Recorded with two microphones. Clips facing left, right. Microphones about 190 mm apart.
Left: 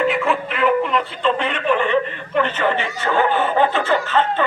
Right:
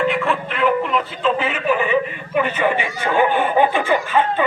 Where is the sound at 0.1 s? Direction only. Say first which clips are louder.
Left 1 dB; centre (ahead or behind).